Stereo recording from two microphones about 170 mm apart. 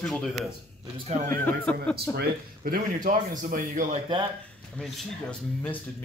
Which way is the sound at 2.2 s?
60° right (ahead or behind).